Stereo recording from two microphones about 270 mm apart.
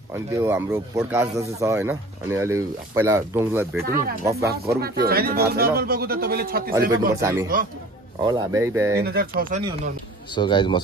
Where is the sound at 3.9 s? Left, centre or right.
Right.